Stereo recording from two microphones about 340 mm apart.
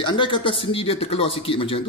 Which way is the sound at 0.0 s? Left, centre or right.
Centre.